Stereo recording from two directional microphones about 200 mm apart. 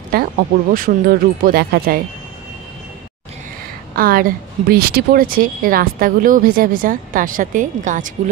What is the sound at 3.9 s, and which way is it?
A woman's voice, 45° right (ahead or behind).